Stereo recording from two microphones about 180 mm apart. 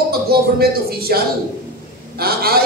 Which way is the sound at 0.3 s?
60° right (ahead or behind).